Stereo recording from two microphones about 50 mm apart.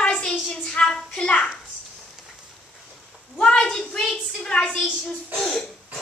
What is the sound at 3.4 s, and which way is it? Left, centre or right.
A woman's voice, centre.